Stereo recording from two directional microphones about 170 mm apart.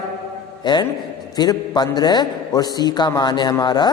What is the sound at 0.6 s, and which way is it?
A man's voice, 25° left (ahead or behind).